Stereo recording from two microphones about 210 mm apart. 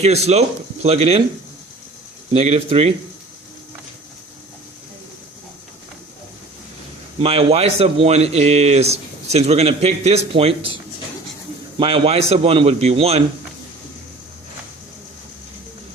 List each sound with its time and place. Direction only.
0.0 s speech: 30° right (ahead or behind)
2.3 s speech: 30° right (ahead or behind)
7.2 s speech: 25° right (ahead or behind)
11.8 s speech: 25° right (ahead or behind)